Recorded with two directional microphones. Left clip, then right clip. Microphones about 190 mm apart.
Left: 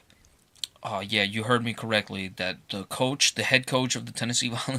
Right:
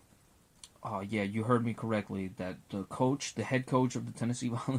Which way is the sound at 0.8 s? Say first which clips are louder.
Left 9 dB; 10° left (ahead or behind).